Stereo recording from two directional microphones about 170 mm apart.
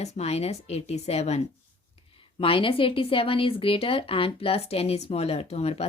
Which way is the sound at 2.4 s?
30° left (ahead or behind).